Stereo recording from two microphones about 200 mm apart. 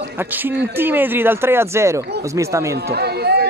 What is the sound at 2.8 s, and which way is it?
Chatter, 55° right (ahead or behind).